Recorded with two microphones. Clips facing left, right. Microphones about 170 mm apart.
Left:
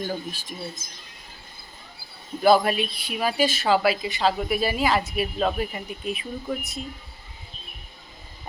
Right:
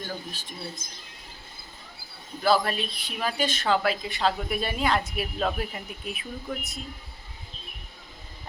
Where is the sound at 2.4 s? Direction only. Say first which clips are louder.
Left 5 dB; 15° left (ahead or behind).